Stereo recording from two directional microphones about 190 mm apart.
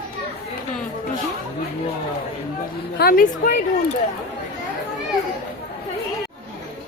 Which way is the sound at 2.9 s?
50° left (ahead or behind).